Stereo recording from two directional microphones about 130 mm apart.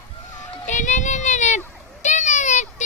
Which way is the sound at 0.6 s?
65° left (ahead or behind).